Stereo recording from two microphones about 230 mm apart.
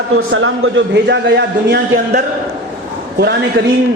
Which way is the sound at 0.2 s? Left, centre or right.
Right.